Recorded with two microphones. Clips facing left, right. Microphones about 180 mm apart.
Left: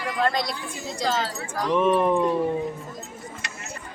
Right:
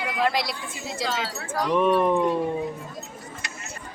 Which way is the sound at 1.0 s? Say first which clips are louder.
Left 4 dB; 40° left (ahead or behind).